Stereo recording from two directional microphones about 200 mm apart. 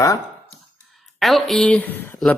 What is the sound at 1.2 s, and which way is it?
Speech, centre (ahead or behind).